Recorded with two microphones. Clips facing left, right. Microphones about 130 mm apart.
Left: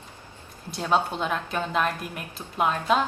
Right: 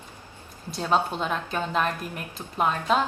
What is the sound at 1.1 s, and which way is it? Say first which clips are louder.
A woman's voice: even; centre (ahead or behind).